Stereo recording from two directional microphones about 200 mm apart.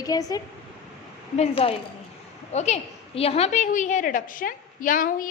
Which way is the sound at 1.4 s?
30° left (ahead or behind).